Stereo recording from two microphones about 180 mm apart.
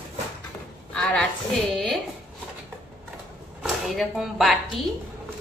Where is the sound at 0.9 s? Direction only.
5° left (ahead or behind).